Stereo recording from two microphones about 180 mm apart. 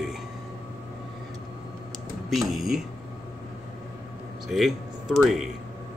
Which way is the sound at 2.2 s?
Centre (ahead or behind).